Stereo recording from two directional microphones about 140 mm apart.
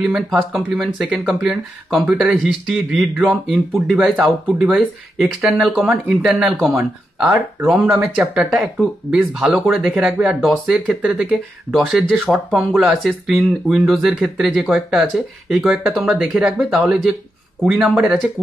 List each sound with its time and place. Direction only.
0.0 s speech: centre (ahead or behind)